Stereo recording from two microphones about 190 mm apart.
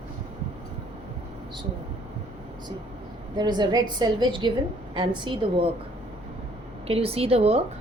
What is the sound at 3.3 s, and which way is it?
A woman's voice, 20° right (ahead or behind).